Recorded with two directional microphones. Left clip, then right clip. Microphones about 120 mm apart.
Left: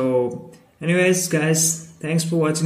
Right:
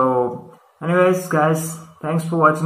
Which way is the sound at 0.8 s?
30° left (ahead or behind).